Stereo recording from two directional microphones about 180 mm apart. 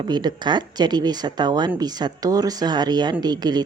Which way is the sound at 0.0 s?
25° right (ahead or behind).